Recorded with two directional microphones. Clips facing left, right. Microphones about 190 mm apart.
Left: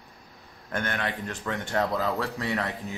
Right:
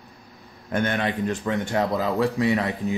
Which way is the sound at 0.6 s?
20° right (ahead or behind).